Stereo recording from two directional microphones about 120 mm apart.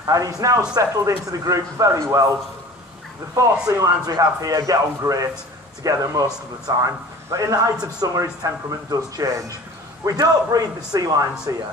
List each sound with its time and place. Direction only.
0.0 s speech: 30° right (ahead or behind)
3.3 s a man's voice: 30° right (ahead or behind)